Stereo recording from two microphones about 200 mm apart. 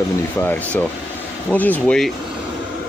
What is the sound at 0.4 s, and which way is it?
Speech, 10° left (ahead or behind).